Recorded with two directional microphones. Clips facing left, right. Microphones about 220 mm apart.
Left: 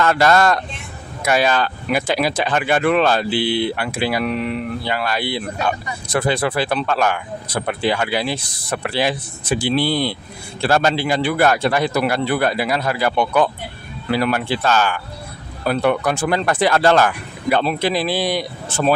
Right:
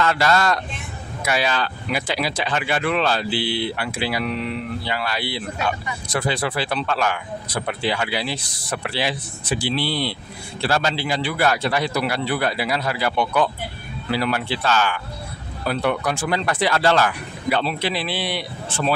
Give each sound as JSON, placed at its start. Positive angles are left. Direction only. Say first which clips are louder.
{"t": 0.0, "sound": "speech", "louder": "left 4 dB", "side_deg": 50}